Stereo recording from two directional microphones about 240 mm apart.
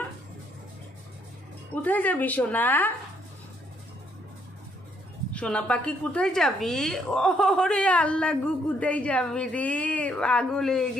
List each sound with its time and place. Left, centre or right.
1.8 s a woman's voice: centre
5.3 s a woman's voice: centre